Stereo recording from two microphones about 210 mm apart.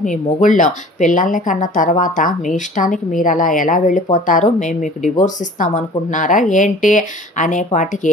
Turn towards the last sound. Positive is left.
turn(degrees=35)  # may be behind; listen again after turning